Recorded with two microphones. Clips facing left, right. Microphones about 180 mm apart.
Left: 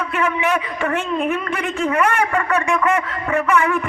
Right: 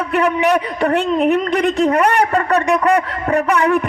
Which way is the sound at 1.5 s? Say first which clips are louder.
Right 5 dB; 40° right (ahead or behind).